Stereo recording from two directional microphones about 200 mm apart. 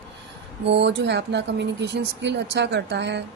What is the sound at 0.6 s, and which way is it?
A woman's voice, 60° right (ahead or behind).